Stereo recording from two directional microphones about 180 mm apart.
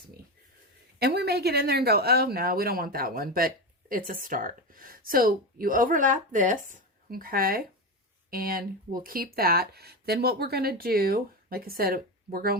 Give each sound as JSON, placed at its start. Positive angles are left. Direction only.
{"t": 0.9, "sound": "speech", "side_deg": -65}